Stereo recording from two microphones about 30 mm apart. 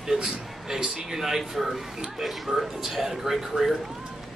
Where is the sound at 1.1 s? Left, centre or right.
Centre.